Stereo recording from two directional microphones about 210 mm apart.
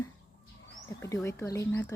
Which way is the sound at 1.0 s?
15° left (ahead or behind).